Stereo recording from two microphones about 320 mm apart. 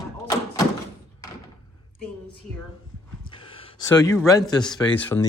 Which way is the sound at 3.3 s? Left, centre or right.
Centre.